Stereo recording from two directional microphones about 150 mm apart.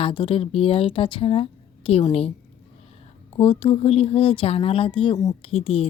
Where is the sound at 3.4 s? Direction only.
35° left (ahead or behind).